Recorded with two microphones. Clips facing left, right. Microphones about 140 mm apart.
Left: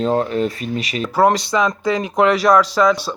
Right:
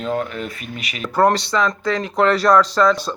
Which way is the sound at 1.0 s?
10° left (ahead or behind).